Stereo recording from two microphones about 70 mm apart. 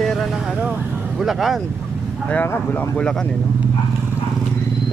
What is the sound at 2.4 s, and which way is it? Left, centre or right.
Speech, left.